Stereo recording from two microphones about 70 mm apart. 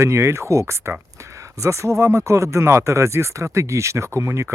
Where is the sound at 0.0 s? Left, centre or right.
Right.